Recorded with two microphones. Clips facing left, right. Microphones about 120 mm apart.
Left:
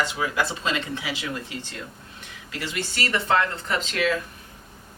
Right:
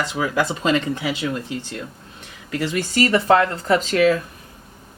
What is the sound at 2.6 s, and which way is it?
A woman's voice, 40° right (ahead or behind).